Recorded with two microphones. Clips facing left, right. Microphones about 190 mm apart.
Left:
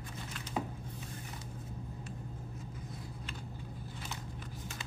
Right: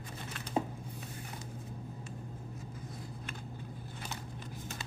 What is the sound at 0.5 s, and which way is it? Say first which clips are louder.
Music: right 4 dB; 30° right (ahead or behind).